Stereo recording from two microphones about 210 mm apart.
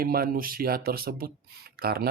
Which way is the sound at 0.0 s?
45° right (ahead or behind).